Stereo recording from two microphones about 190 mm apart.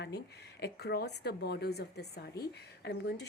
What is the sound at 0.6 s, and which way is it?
Speech, 60° left (ahead or behind).